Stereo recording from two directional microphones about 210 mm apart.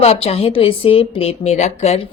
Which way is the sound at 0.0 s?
30° left (ahead or behind).